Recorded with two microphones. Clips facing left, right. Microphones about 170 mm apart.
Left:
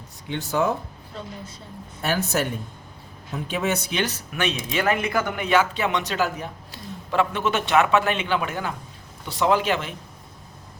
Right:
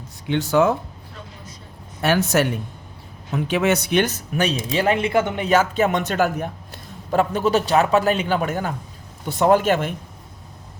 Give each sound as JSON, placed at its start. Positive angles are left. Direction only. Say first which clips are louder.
{"t": 0.3, "sound": "speech", "louder": "right 6 dB", "side_deg": -80}
{"t": 2.0, "sound": "speech", "louder": "right 6 dB", "side_deg": -75}
{"t": 4.0, "sound": "speech", "louder": "right 4 dB", "side_deg": -45}
{"t": 5.5, "sound": "a man's voice", "louder": "right 1 dB", "side_deg": -45}